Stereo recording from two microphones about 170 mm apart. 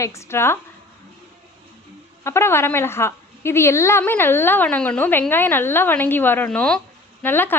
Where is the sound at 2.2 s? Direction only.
15° left (ahead or behind).